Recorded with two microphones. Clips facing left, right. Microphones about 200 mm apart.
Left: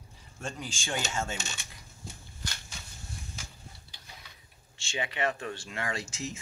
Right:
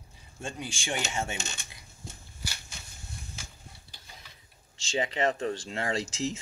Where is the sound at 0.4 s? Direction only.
15° right (ahead or behind).